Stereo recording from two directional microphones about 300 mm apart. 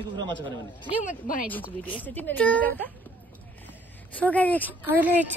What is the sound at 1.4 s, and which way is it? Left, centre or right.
Speech, centre.